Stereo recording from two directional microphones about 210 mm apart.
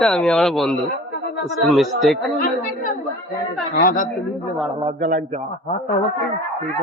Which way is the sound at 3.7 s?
40° left (ahead or behind).